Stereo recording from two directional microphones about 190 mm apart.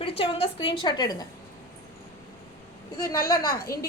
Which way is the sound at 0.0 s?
30° left (ahead or behind).